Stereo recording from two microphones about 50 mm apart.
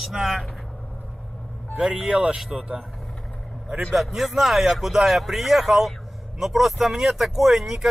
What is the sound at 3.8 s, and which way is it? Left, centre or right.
Speech, centre.